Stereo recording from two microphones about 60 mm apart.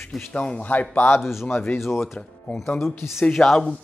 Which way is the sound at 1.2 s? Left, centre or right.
Centre.